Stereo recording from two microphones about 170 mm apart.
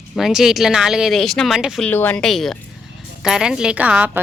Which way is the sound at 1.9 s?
10° left (ahead or behind).